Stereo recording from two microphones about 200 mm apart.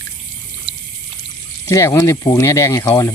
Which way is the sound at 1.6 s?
15° left (ahead or behind).